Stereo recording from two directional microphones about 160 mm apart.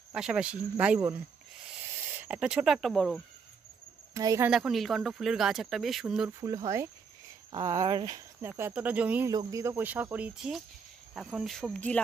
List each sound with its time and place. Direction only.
0.1 s speech: 5° right (ahead or behind)
2.1 s speech: 10° right (ahead or behind)
4.1 s speech: 20° right (ahead or behind)
4.5 s speech: 5° right (ahead or behind)
6.4 s speech: 20° right (ahead or behind)
9.3 s speech: 20° right (ahead or behind); by 12.0 s 5° left (ahead or behind)